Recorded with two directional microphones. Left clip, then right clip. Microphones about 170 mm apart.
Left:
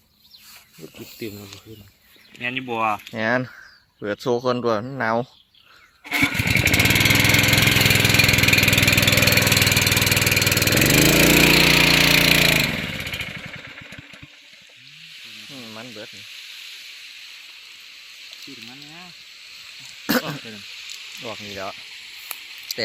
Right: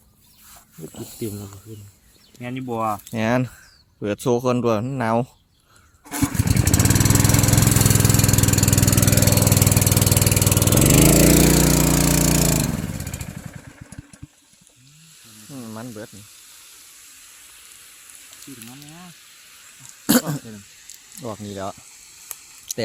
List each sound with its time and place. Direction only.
2.4 s speech: 15° right (ahead or behind)
6.1 s lawn mower: centre (ahead or behind)
6.7 s engine: centre (ahead or behind)
9.6 s engine: 10° right (ahead or behind); by 11.7 s 10° left (ahead or behind)
11.7 s a sound: 10° right (ahead or behind)
12.7 s motorcycle: centre (ahead or behind)
15.5 s a sound: 25° right (ahead or behind)
18.3 s cattle: 45° right (ahead or behind)
20.3 s sizzle: 50° right (ahead or behind)
21.5 s speech: 30° right (ahead or behind)